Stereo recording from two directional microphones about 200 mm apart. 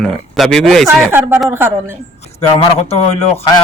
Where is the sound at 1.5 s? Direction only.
10° right (ahead or behind).